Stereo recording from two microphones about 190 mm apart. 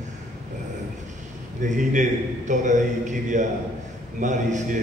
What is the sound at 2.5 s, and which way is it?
A man's voice, 40° right (ahead or behind).